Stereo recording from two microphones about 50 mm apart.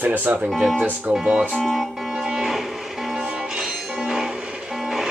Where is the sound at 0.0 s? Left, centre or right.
Right.